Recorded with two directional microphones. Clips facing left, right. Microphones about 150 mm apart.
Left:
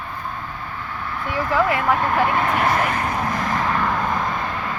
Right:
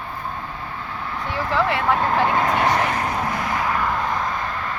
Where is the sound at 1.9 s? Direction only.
25° right (ahead or behind).